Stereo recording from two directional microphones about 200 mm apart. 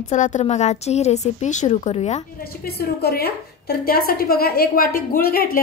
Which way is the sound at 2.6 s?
50° left (ahead or behind).